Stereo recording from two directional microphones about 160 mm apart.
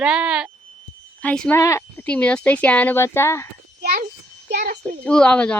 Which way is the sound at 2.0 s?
5° left (ahead or behind).